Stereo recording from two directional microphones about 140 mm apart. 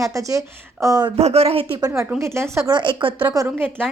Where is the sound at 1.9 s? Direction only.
15° right (ahead or behind).